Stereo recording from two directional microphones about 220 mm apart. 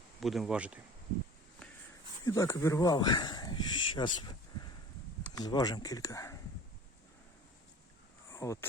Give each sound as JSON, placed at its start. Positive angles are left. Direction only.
{"t": 0.2, "sound": "speech", "side_deg": 0}
{"t": 2.2, "sound": "speech", "side_deg": 15}
{"t": 8.3, "sound": "a sound", "side_deg": 15}